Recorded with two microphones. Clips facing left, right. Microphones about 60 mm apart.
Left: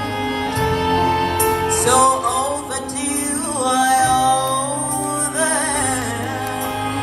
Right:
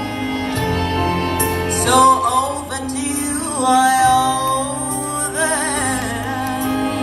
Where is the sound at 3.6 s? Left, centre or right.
Right.